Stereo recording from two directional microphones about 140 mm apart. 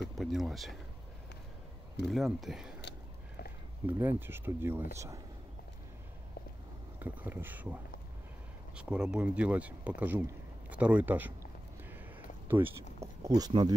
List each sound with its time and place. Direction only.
0.2 s speech: centre (ahead or behind)
2.0 s speech: centre (ahead or behind)
3.8 s speech: 15° right (ahead or behind)
7.0 s speech: 15° right (ahead or behind)
11.9 s a sound: 15° right (ahead or behind)
13.0 s speech: 25° right (ahead or behind)